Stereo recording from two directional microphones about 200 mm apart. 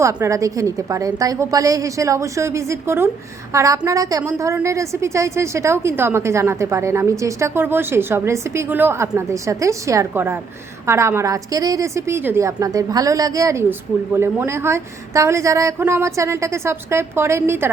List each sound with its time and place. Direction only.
0.0 s a woman's voice: 15° right (ahead or behind)